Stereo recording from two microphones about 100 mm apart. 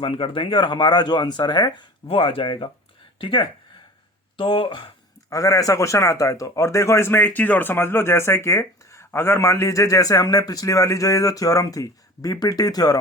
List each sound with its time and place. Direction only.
0.0 s speech: 60° left (ahead or behind)
2.0 s speech: 65° left (ahead or behind)
5.3 s a man's voice: 35° left (ahead or behind)